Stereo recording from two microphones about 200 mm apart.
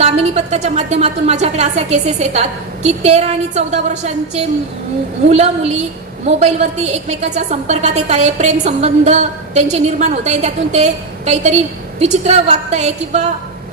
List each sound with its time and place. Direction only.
0.0 s a woman's voice: 35° right (ahead or behind)